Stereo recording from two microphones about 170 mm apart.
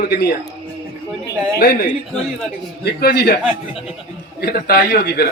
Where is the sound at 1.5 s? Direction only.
65° left (ahead or behind).